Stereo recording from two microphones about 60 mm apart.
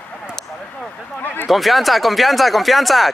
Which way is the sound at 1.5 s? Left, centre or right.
Centre.